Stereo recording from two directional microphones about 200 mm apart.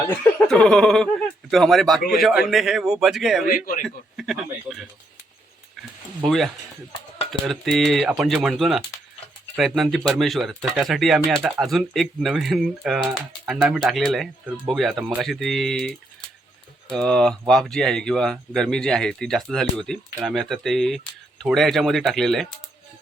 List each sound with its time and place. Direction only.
0.4 s speech: 5° left (ahead or behind)
3.4 s a man's voice: 45° left (ahead or behind)
3.8 s speech: centre (ahead or behind)
6.2 s speech: centre (ahead or behind)